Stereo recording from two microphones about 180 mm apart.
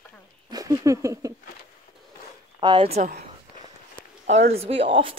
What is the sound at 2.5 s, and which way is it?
Speech, 30° right (ahead or behind).